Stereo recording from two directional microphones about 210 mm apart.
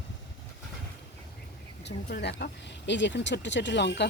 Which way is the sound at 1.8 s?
55° left (ahead or behind).